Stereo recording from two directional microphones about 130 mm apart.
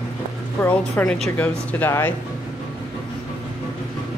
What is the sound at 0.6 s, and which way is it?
A woman's voice, 10° left (ahead or behind).